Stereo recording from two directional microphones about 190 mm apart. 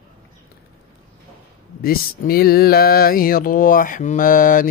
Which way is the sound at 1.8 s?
50° left (ahead or behind).